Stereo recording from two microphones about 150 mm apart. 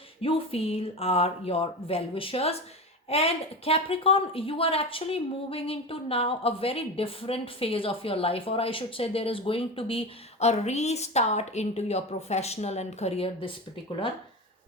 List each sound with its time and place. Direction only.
0.2 s a woman's voice: 40° left (ahead or behind)